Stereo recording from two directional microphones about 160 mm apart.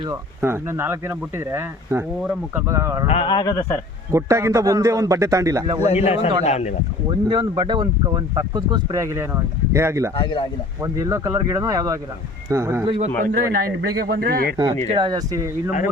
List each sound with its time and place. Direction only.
0.0 s speech: 15° right (ahead or behind)
3.1 s speech: 30° left (ahead or behind)
4.1 s speech: 20° right (ahead or behind)
5.8 s a man's voice: 45° left (ahead or behind)
7.3 s speech: 30° right (ahead or behind)
10.2 s speech: 35° left (ahead or behind)
10.8 s speech: 20° right (ahead or behind)
12.8 s a man's voice: 35° right (ahead or behind)
13.2 s a man's voice: 60° right (ahead or behind)
14.1 s a man's voice: 70° right (ahead or behind)
14.8 s speech: 30° right (ahead or behind)